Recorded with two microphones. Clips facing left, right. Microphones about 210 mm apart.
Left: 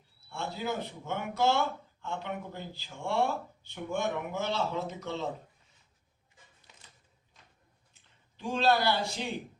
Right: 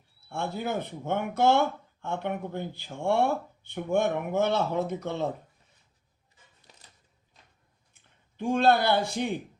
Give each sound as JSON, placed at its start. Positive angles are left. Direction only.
{"t": 0.3, "sound": "speech", "side_deg": -55}
{"t": 6.7, "sound": "a sound", "side_deg": -40}
{"t": 8.0, "sound": "speech", "side_deg": -55}